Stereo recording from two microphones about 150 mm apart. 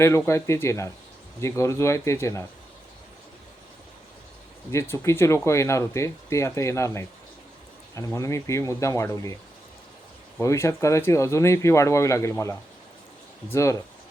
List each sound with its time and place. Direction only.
0.3 s speech: 20° left (ahead or behind)
4.7 s speech: 20° left (ahead or behind)
10.4 s speech: 20° left (ahead or behind)